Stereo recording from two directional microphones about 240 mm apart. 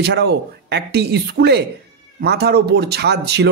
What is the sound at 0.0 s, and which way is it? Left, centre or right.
Speech, right.